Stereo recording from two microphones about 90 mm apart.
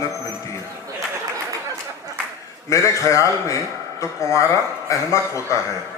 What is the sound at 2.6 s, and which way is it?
A man's voice, 35° left (ahead or behind).